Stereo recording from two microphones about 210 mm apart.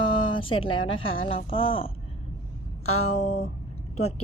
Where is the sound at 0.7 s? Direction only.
25° left (ahead or behind).